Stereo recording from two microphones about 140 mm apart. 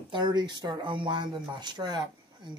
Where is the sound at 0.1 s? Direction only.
30° right (ahead or behind).